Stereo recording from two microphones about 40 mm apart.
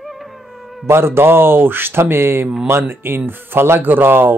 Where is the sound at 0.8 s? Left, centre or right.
Right.